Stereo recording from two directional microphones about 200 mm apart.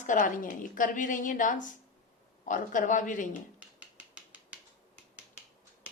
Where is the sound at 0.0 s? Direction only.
40° left (ahead or behind).